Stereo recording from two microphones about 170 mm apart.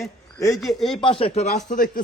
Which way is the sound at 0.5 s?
Centre (ahead or behind).